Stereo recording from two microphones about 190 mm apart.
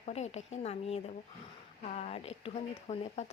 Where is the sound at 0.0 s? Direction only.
35° left (ahead or behind).